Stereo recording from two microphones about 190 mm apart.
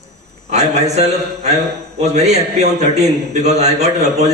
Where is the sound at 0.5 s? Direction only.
35° right (ahead or behind).